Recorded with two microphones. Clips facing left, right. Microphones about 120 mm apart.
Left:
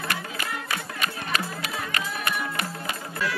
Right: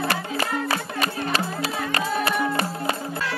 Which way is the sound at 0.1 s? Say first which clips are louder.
Right 6 dB; 35° right (ahead or behind).